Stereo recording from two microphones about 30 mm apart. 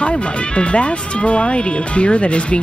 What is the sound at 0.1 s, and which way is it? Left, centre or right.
Speech, left.